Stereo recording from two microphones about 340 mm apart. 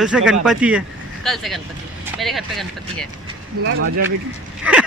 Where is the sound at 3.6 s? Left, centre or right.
Right.